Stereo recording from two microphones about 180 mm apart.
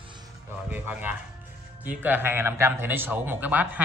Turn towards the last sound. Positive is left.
turn(degrees=-10)  # may be behind; listen again after turning